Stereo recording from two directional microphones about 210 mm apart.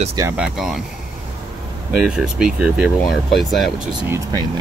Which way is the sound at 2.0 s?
5° right (ahead or behind).